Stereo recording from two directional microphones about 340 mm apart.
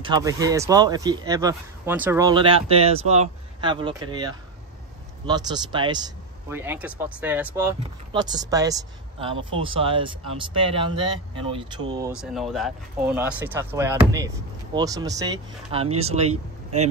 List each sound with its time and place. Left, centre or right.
0.0 s speech: centre
12.2 s speech: centre